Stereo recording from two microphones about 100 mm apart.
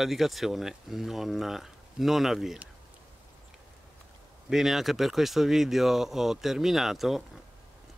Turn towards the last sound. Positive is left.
turn(degrees=0)  # may be behind; listen again after turning